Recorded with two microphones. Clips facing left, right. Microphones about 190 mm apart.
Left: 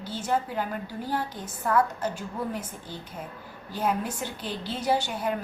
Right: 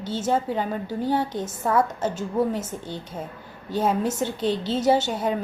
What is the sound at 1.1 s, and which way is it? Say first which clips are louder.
A woman's voice: right 7 dB; 25° right (ahead or behind).